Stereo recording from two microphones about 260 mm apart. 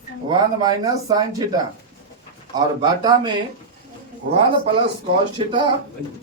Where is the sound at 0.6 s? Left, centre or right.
Centre.